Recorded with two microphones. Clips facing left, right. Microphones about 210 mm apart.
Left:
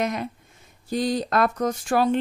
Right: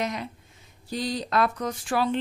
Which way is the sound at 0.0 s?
50° left (ahead or behind).